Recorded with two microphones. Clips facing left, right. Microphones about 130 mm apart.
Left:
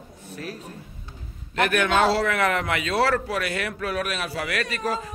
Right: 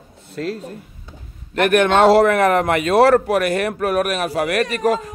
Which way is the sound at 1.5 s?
50° right (ahead or behind).